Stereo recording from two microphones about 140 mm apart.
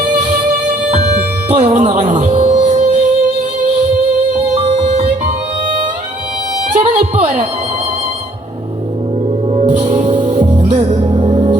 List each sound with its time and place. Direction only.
1.5 s music: 55° right (ahead or behind)
4.7 s music: 50° right (ahead or behind)
7.0 s music: 45° right (ahead or behind)
9.5 s music: 50° right (ahead or behind)